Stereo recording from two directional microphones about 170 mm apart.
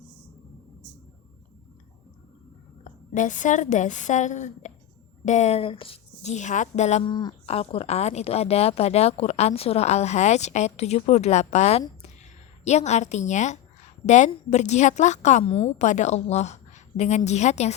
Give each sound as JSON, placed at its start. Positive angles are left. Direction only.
{"t": 2.8, "sound": "a woman's voice", "side_deg": 50}
{"t": 7.0, "sound": "a woman's voice", "side_deg": 25}